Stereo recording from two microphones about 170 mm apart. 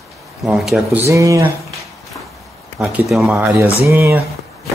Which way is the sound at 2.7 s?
Centre (ahead or behind).